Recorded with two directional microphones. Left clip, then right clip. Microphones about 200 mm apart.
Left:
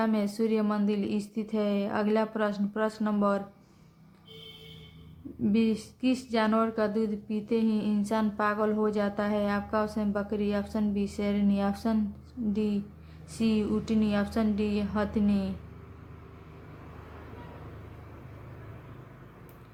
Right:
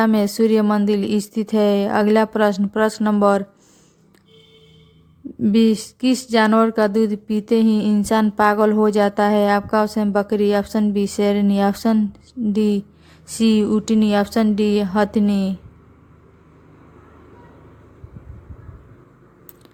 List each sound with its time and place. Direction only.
0.0 s speech: 50° right (ahead or behind)
5.4 s speech: 50° right (ahead or behind)